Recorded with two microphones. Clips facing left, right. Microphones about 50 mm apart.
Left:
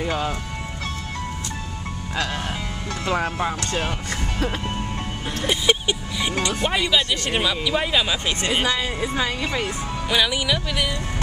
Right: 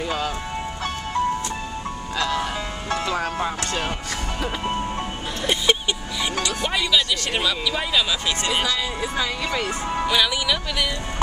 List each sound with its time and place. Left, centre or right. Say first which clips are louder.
2.1 s speech: right 2 dB; left
5.4 s speech: even; centre
6.6 s speech: even; centre
10.0 s speech: left 1 dB; centre